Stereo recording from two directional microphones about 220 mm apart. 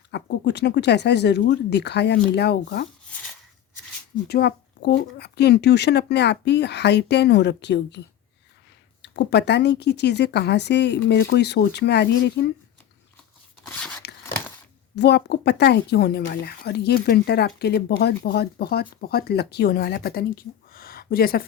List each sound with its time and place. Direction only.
0.1 s speech: 50° left (ahead or behind)
4.3 s speech: 45° left (ahead or behind)
13.7 s a sound: 5° left (ahead or behind)
14.9 s speech: 50° left (ahead or behind)